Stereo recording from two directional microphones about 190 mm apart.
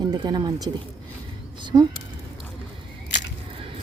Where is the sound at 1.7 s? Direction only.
25° right (ahead or behind).